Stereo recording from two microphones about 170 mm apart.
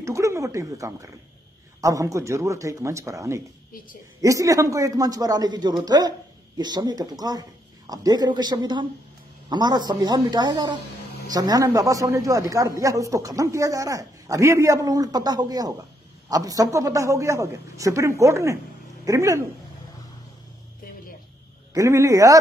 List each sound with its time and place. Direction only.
0.0 s a sound: 15° right (ahead or behind)
1.8 s a man's voice: 20° right (ahead or behind)
21.7 s a man's voice: 15° right (ahead or behind)